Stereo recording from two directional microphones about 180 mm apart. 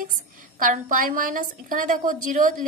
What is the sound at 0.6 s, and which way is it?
A woman's voice, 50° right (ahead or behind).